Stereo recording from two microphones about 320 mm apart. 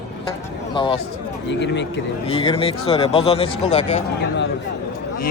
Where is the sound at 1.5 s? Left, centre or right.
Left.